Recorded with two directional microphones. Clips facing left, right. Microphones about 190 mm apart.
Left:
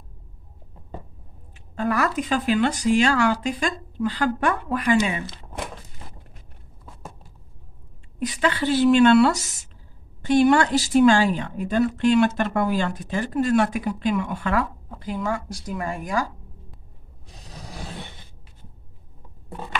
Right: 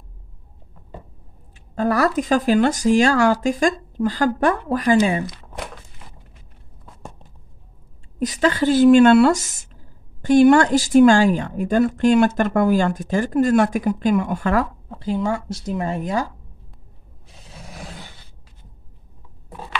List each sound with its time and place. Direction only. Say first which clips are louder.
1.8 s speech: right 4 dB; 40° right (ahead or behind)
8.2 s speech: right 5 dB; 40° right (ahead or behind)
15.0 s speech: right 5 dB; 25° right (ahead or behind)
17.3 s a sound: left 1 dB; 40° left (ahead or behind)